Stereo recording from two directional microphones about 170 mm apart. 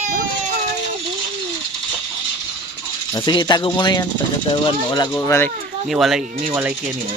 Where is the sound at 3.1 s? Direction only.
25° left (ahead or behind).